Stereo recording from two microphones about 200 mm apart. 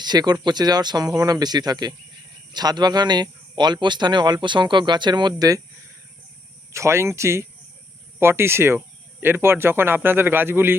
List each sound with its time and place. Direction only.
0.0 s speech: 20° right (ahead or behind)
6.7 s speech: 15° right (ahead or behind)